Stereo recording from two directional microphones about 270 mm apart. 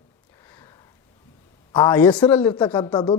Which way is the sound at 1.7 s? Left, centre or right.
Centre.